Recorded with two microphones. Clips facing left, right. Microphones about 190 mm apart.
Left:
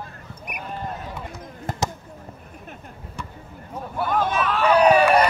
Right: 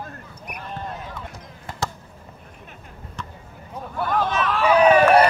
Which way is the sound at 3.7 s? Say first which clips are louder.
Even; 5° left (ahead or behind).